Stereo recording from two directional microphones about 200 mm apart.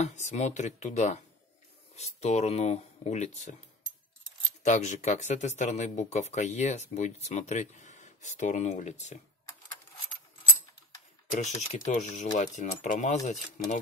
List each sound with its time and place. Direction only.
0.0 s speech: 35° left (ahead or behind)
4.6 s speech: 35° left (ahead or behind)
11.3 s speech: 35° left (ahead or behind)